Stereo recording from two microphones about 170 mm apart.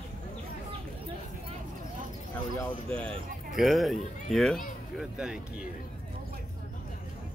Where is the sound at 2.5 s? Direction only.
10° left (ahead or behind).